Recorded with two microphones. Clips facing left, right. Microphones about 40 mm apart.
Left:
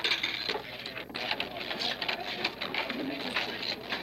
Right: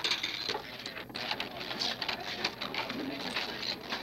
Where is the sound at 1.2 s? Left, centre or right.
Centre.